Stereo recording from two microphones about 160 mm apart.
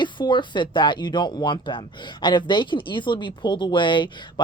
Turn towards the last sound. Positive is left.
turn(degrees=30)  # may be behind; listen again after turning